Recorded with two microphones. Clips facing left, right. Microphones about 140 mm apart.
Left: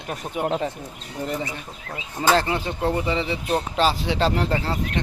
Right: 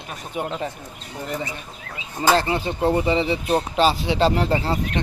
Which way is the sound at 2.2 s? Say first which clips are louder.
Right 1 dB; 10° right (ahead or behind).